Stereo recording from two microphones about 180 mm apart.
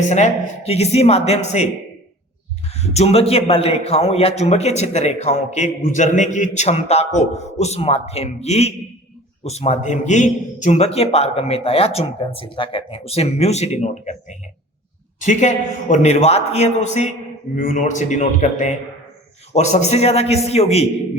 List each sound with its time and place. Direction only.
0.1 s a man's voice: 40° left (ahead or behind)
2.6 s a man's voice: 35° left (ahead or behind)